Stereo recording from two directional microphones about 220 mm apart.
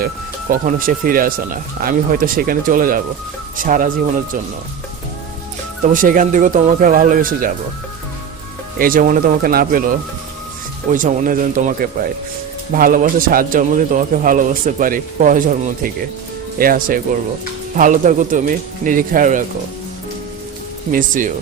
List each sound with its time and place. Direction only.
0.5 s a man's voice: 40° right (ahead or behind)
5.8 s a man's voice: 35° right (ahead or behind)
8.8 s a man's voice: 40° right (ahead or behind)
20.9 s a man's voice: 35° right (ahead or behind)